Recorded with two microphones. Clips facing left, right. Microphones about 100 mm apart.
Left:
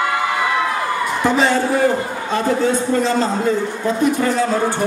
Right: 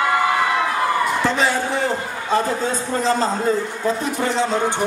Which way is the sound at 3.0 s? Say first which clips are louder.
Left 2 dB; 35° right (ahead or behind).